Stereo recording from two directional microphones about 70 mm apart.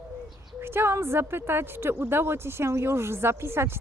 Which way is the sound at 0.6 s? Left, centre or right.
Right.